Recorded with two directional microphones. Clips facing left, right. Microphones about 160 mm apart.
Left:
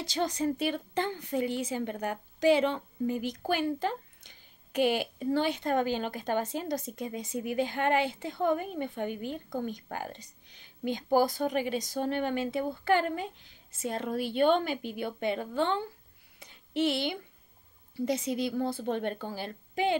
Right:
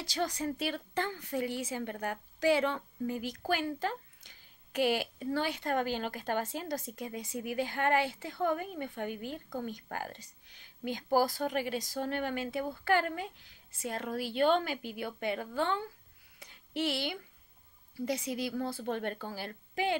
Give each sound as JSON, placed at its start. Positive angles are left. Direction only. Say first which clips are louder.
{"t": 0.0, "sound": "speech", "louder": "left 4 dB", "side_deg": 25}
{"t": 16.3, "sound": "a sound", "louder": "left 5 dB", "side_deg": 20}
{"t": 17.9, "sound": "speech", "louder": "left 4 dB", "side_deg": 20}